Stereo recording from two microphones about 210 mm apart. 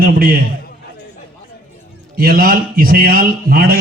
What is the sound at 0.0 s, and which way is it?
Speech, 45° right (ahead or behind).